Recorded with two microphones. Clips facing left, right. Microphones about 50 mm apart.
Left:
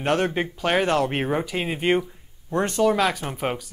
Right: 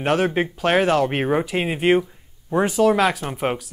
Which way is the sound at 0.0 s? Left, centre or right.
Centre.